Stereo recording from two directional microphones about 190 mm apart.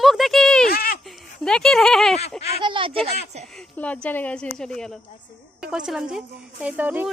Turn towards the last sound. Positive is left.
turn(degrees=-10)  # may be behind; listen again after turning